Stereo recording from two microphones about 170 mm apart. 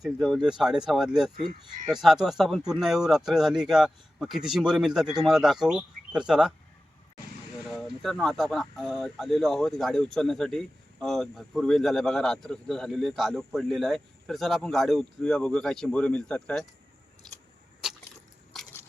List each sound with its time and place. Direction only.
0.0 s speech: centre (ahead or behind)
7.7 s speech: centre (ahead or behind)
17.8 s a sound: 5° right (ahead or behind)